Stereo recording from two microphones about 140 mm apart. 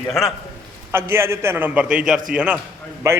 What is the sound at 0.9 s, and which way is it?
A man's voice, 15° right (ahead or behind).